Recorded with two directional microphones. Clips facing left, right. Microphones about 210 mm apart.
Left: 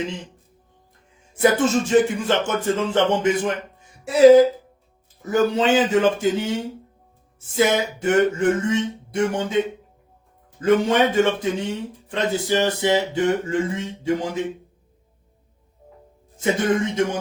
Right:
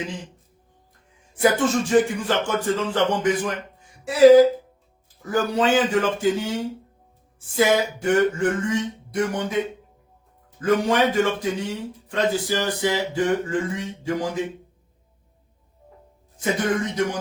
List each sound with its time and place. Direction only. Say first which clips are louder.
1.4 s speech: left 2 dB; 20° left (ahead or behind)
10.6 s speech: left 2 dB; 25° left (ahead or behind)
16.4 s speech: left 3 dB; 25° left (ahead or behind)